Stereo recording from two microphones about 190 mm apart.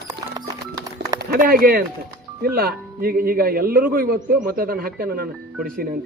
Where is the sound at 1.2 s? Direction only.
50° right (ahead or behind).